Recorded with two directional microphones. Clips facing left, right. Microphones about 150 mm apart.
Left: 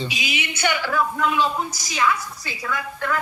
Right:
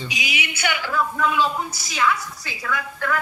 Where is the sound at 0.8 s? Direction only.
10° left (ahead or behind).